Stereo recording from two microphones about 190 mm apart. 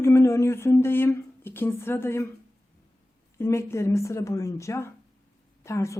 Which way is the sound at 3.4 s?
15° left (ahead or behind).